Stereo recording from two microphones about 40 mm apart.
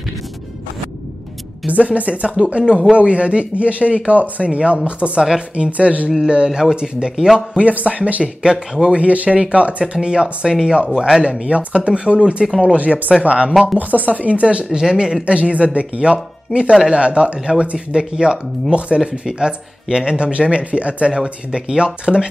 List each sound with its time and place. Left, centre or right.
1.7 s a man's voice: right
6.2 s speech: right
7.5 s a man's voice: right
13.7 s a man's voice: right
14.8 s speech: centre
15.2 s a man's voice: right
21.1 s speech: centre